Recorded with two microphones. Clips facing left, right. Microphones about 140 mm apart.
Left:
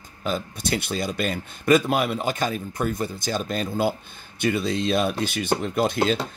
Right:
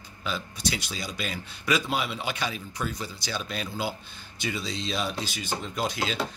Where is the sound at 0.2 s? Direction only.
50° left (ahead or behind).